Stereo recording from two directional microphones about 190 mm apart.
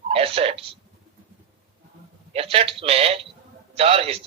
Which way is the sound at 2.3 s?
30° right (ahead or behind).